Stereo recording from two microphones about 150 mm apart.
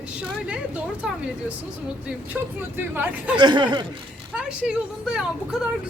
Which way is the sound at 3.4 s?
30° right (ahead or behind).